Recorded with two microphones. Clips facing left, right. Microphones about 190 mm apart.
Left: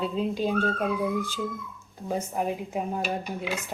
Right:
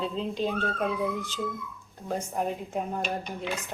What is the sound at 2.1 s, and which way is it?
Speech, 5° left (ahead or behind).